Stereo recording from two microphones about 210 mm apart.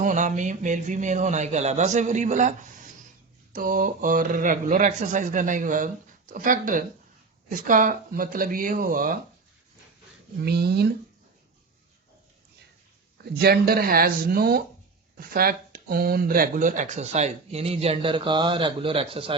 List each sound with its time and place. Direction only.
0.0 s speech: 35° right (ahead or behind)
10.4 s speech: 50° right (ahead or behind)
13.4 s speech: 45° right (ahead or behind); by 19.4 s 25° right (ahead or behind)